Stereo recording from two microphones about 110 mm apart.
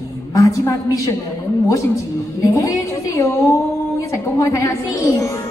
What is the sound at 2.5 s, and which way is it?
A woman's voice, 25° left (ahead or behind).